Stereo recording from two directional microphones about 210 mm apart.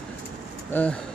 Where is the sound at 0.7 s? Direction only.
5° left (ahead or behind).